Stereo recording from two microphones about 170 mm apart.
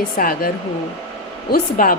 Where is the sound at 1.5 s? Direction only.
55° left (ahead or behind).